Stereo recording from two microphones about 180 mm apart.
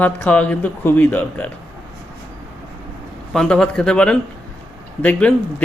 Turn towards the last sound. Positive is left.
turn(degrees=5)  # may be behind; listen again after turning